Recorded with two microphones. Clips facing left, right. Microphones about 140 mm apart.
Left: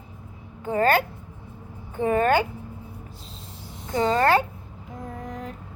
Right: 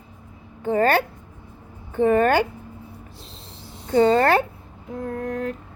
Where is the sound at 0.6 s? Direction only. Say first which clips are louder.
Right 2 dB; 35° right (ahead or behind).